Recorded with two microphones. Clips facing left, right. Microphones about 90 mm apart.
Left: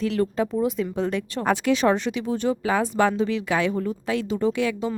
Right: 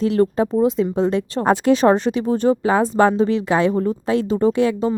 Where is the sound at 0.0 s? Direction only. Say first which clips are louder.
Right 6 dB; 30° right (ahead or behind).